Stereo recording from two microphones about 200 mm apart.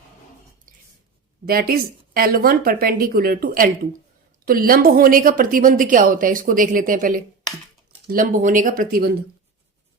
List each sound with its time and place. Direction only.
1.5 s a woman's voice: 45° right (ahead or behind)